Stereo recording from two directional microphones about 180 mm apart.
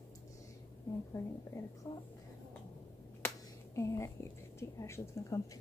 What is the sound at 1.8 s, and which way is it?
Speech, 20° left (ahead or behind).